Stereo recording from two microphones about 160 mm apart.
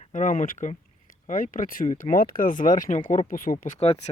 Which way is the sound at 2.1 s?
65° left (ahead or behind).